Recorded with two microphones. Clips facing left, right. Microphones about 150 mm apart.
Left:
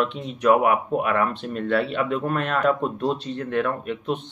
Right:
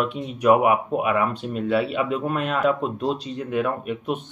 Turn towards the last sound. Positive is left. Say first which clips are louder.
# even
turn(degrees=-10)  # may be behind; listen again after turning